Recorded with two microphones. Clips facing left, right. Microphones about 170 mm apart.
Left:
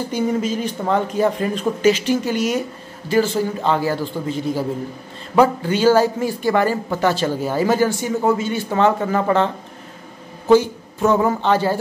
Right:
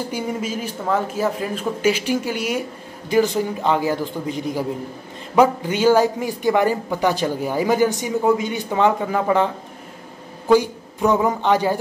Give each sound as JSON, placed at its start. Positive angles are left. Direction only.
{"t": 0.1, "sound": "a man's voice", "side_deg": -10}
{"t": 10.5, "sound": "speech", "side_deg": -15}